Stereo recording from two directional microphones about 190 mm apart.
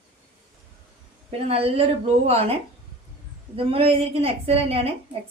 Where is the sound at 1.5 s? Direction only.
30° right (ahead or behind).